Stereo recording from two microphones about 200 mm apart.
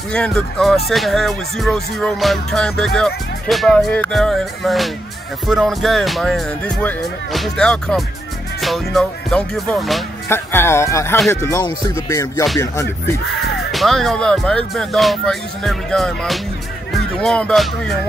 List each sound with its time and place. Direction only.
0.1 s speech: 5° left (ahead or behind)
10.2 s music: 10° left (ahead or behind)
13.7 s speech: centre (ahead or behind)